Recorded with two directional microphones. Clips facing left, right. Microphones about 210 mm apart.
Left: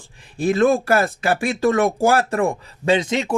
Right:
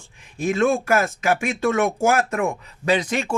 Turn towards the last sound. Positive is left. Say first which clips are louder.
# left 3 dB
turn(degrees=20)  # may be behind; listen again after turning